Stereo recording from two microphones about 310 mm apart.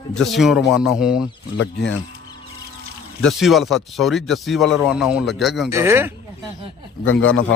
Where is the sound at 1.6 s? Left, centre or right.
Left.